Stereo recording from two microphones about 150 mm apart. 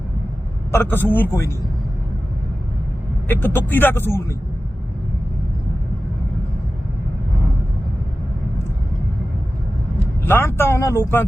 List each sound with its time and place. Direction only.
0.7 s speech: 15° left (ahead or behind)
3.2 s speech: 15° left (ahead or behind)
10.2 s speech: 15° left (ahead or behind)